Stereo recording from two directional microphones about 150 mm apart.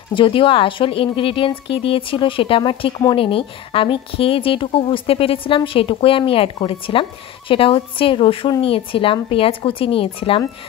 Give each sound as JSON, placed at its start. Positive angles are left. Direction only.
{"t": 0.1, "sound": "a woman's voice", "side_deg": 35}